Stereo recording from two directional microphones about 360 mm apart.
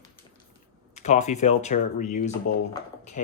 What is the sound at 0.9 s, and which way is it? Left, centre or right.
Speech, centre.